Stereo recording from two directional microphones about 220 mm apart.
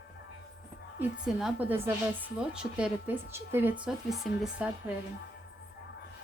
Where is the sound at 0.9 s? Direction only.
5° right (ahead or behind).